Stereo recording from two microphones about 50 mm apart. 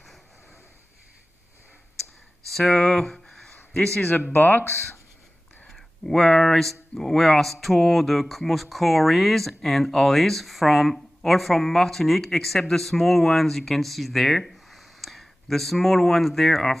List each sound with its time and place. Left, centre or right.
2.5 s a sound: centre
4.3 s speech: left
5.7 s speech: centre